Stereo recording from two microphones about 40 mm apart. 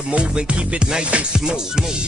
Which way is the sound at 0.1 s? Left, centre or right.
Right.